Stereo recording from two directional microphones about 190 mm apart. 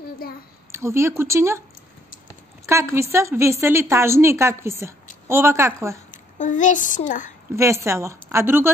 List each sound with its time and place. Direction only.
0.2 s a child's voice: 50° left (ahead or behind)
0.7 s a woman's voice: 15° right (ahead or behind)
2.6 s a woman's voice: 15° right (ahead or behind)
6.1 s a woman's voice: 40° left (ahead or behind)
7.5 s a woman's voice: 15° right (ahead or behind)